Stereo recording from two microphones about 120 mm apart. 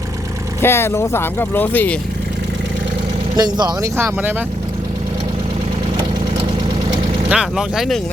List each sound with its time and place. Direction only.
0.6 s speech: 20° left (ahead or behind)
3.3 s speech: 35° right (ahead or behind); by 4.4 s 15° right (ahead or behind)
7.3 s speech: 5° right (ahead or behind)